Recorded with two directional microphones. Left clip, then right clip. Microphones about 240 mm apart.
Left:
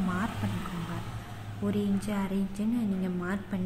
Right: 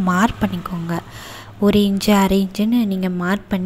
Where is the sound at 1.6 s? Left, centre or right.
Right.